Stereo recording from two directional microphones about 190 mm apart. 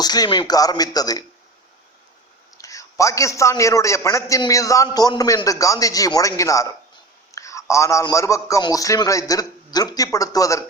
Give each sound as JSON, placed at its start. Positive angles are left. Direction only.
{"t": 0.0, "sound": "speech", "side_deg": 20}
{"t": 2.6, "sound": "a man's voice", "side_deg": 15}